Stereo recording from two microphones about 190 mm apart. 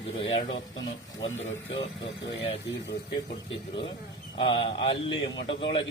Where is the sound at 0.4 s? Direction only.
75° left (ahead or behind).